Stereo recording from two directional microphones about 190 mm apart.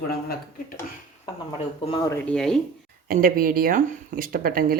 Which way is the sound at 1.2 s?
25° left (ahead or behind).